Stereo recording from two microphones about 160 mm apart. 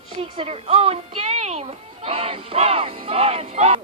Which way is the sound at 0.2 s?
35° right (ahead or behind).